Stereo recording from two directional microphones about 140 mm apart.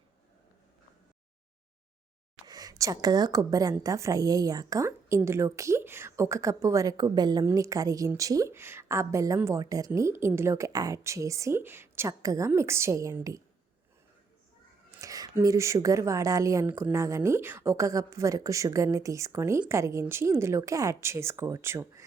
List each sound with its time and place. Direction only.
2.5 s a woman's voice: 25° right (ahead or behind)
15.0 s a woman's voice: 25° right (ahead or behind)